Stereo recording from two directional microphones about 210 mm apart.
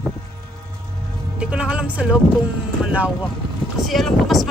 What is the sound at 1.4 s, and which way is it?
Speech, 5° right (ahead or behind).